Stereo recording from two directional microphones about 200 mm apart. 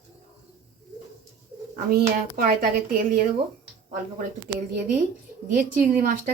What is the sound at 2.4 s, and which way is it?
Speech, 45° right (ahead or behind).